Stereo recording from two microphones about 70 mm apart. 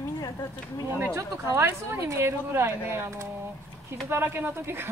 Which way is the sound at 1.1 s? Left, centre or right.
Right.